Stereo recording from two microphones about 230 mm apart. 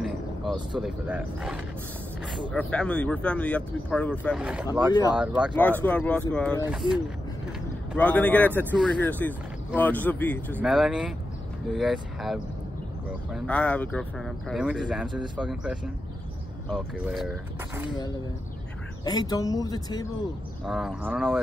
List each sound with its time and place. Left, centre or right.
0.0 s speech: centre
5.6 s speech: centre
19.0 s speech: centre
20.6 s speech: centre